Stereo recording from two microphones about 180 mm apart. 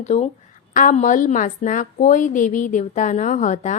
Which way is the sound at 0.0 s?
40° left (ahead or behind).